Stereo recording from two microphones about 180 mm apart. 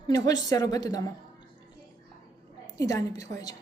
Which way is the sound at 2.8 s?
20° left (ahead or behind).